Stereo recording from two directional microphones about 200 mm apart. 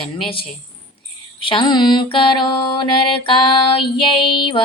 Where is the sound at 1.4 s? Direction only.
25° left (ahead or behind).